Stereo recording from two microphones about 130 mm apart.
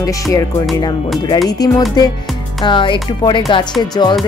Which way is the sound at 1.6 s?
30° left (ahead or behind).